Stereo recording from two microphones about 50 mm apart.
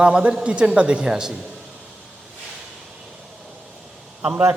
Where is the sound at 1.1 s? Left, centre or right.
Centre.